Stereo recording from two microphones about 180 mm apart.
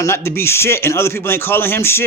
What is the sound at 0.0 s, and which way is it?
Speech, 15° left (ahead or behind).